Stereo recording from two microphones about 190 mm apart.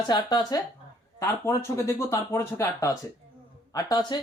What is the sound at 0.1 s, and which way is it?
Speech, 20° left (ahead or behind).